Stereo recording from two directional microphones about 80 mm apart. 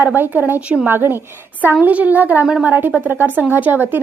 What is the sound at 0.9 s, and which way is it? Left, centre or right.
A woman's voice, right.